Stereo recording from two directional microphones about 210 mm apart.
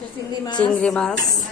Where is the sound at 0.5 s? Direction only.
5° left (ahead or behind).